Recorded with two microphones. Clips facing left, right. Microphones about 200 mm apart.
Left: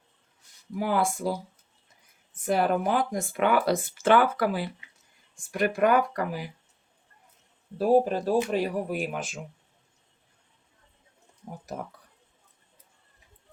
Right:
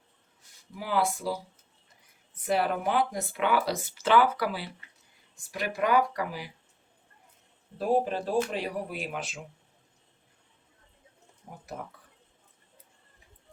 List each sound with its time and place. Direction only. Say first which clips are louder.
0.8 s speech: left 3 dB; 50° left (ahead or behind)
7.8 s speech: left 5 dB; 40° left (ahead or behind)